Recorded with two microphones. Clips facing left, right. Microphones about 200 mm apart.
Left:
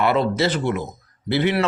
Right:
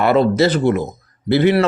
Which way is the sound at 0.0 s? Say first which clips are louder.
Right 5 dB; 40° right (ahead or behind).